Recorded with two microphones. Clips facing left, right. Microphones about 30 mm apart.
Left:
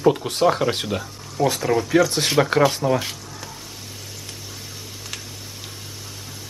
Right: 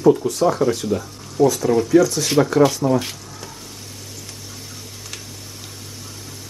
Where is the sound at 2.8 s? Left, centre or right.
Centre.